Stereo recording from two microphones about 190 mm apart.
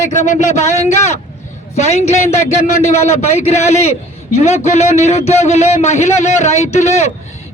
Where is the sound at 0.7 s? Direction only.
35° left (ahead or behind).